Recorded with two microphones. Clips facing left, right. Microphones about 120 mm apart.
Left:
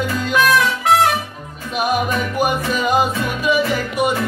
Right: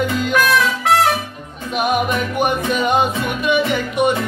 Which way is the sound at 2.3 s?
5° left (ahead or behind).